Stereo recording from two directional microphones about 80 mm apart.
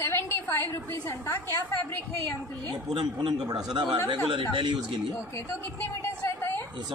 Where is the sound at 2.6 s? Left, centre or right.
Right.